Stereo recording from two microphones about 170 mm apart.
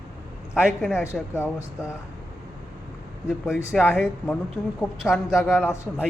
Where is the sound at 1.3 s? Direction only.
15° left (ahead or behind).